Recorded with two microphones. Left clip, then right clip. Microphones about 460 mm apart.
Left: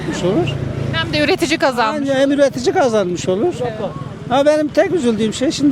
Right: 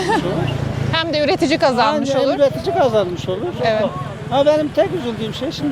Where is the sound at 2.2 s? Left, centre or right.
Left.